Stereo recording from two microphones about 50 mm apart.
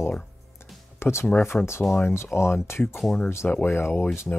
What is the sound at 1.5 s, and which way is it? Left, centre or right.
Speech, left.